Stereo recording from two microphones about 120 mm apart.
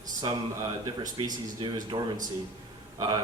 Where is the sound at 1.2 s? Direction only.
45° right (ahead or behind).